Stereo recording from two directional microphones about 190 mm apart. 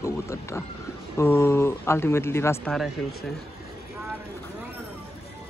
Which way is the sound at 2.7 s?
Centre (ahead or behind).